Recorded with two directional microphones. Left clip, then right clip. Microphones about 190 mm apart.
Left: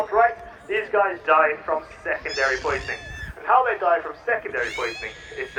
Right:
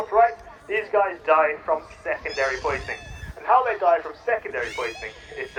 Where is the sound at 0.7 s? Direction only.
40° right (ahead or behind).